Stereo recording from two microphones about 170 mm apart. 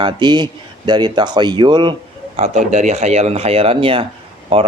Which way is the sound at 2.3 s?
45° right (ahead or behind).